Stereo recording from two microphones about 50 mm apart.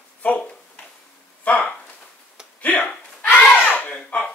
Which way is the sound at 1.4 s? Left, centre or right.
Left.